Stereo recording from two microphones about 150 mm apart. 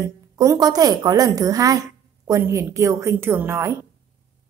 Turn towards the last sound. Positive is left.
turn(degrees=-15)  # may be behind; listen again after turning